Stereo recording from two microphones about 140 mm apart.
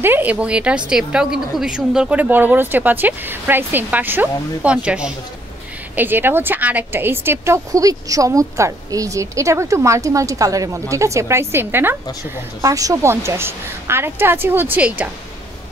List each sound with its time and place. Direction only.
0.0 s a woman's voice: 15° right (ahead or behind)